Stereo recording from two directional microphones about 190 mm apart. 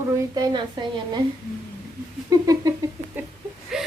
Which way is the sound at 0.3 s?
20° right (ahead or behind).